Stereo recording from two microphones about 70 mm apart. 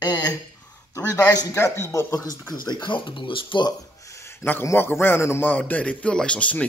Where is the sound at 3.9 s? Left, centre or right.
Left.